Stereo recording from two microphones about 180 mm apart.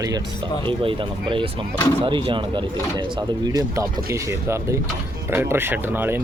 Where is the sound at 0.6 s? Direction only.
30° right (ahead or behind).